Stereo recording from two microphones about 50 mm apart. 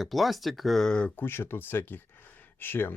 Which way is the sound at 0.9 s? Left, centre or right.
Left.